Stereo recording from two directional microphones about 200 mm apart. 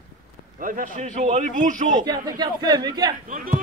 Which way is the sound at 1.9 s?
20° right (ahead or behind).